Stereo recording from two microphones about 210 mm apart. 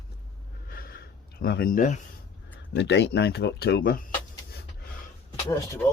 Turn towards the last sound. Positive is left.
turn(degrees=15)  # may be behind; listen again after turning